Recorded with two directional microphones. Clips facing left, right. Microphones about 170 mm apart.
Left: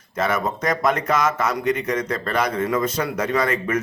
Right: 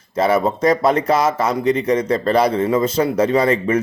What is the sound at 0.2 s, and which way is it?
Speech, 30° right (ahead or behind).